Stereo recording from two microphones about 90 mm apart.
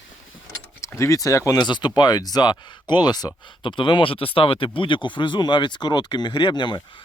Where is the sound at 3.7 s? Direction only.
65° left (ahead or behind).